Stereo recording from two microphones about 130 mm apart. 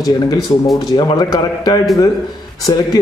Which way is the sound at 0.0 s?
30° left (ahead or behind).